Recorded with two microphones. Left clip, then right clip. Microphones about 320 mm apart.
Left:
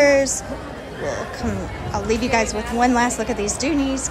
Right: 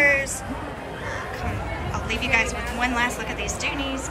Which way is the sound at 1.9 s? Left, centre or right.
Centre.